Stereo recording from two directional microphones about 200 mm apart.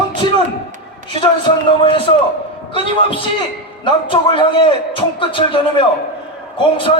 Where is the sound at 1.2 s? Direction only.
25° left (ahead or behind).